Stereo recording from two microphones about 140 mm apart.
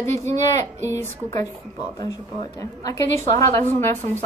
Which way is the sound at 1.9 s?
30° left (ahead or behind).